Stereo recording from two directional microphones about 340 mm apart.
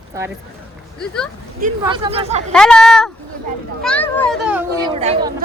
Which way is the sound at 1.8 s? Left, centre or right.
Centre.